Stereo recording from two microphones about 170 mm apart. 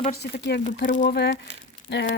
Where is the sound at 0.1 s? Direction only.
70° left (ahead or behind).